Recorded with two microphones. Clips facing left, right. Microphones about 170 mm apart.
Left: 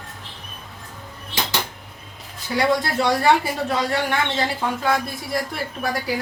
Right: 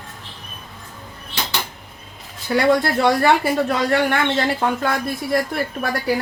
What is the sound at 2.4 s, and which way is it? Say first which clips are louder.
Speech: right 4 dB; 55° right (ahead or behind).